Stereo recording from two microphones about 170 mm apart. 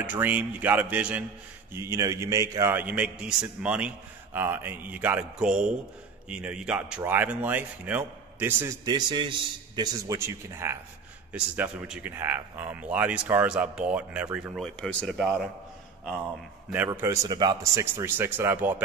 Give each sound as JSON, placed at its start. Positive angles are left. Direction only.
{"t": 0.0, "sound": "speech", "side_deg": -10}
{"t": 8.8, "sound": "a man's voice", "side_deg": -25}
{"t": 10.0, "sound": "speech", "side_deg": -15}
{"t": 16.7, "sound": "speech", "side_deg": -10}